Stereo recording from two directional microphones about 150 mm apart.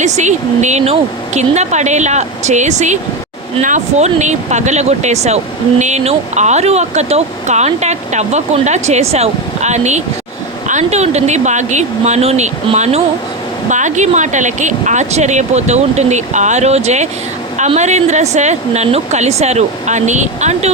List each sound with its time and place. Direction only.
0.0 s speech: 50° right (ahead or behind)